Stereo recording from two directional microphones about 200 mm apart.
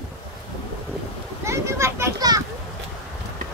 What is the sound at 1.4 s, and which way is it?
Children playing, 15° right (ahead or behind).